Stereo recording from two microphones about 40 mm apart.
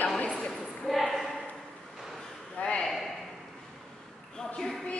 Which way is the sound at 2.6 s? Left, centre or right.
Left.